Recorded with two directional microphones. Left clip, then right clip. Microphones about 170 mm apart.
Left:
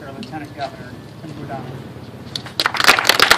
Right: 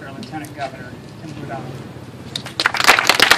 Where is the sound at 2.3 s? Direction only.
50° left (ahead or behind).